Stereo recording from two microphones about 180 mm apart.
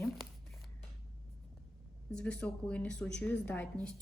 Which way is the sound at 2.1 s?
5° left (ahead or behind).